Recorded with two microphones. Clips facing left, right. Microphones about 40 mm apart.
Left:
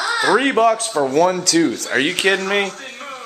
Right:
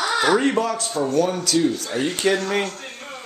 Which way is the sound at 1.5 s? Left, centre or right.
Left.